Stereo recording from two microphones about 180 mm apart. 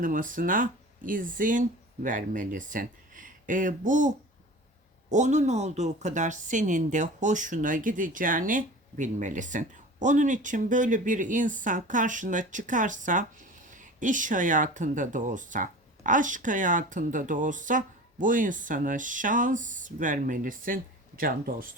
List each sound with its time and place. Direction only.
0.0 s speech: 50° right (ahead or behind)
5.1 s speech: 40° right (ahead or behind)